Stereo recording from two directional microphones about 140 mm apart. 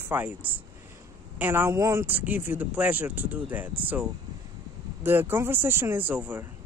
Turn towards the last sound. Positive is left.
turn(degrees=-10)  # may be behind; listen again after turning